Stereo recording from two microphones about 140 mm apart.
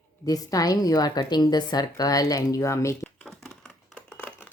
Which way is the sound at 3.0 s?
5° left (ahead or behind).